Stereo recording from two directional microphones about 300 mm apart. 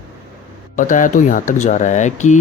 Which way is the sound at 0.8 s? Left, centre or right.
Left.